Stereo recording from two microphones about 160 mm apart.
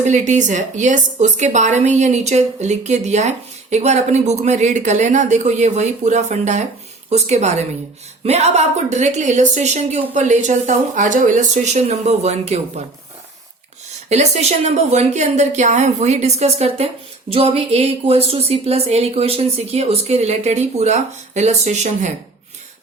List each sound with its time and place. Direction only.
0.0 s a woman's voice: 50° right (ahead or behind)
14.1 s a woman's voice: 45° right (ahead or behind)